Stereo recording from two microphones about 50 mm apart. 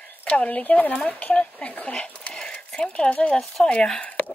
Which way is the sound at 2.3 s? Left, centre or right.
Centre.